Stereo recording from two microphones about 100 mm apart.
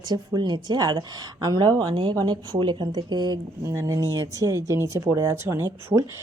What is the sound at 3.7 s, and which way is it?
Speech, 30° right (ahead or behind).